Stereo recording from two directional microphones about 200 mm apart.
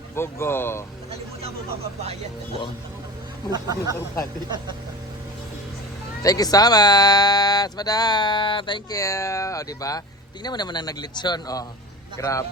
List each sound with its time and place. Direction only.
0.2 s speech: 10° left (ahead or behind)
1.1 s a sound: 30° right (ahead or behind)
3.5 s speech: 20° right (ahead or behind)
6.2 s speech: 20° left (ahead or behind)